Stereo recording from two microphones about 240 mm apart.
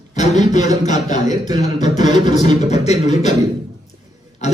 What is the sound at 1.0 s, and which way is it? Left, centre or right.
Speech, left.